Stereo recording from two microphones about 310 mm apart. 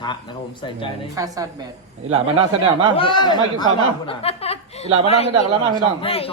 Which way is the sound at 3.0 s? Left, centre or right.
Centre.